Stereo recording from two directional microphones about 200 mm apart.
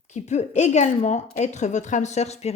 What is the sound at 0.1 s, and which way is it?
A woman's voice, 35° left (ahead or behind).